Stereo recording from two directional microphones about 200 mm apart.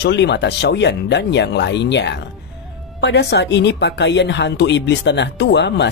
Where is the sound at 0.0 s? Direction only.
60° left (ahead or behind).